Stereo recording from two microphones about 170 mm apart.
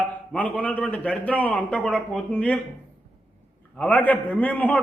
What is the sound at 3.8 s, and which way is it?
A man's voice, 10° left (ahead or behind).